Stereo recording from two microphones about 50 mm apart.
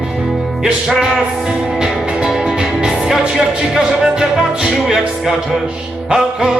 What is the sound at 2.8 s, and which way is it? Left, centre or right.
Music, centre.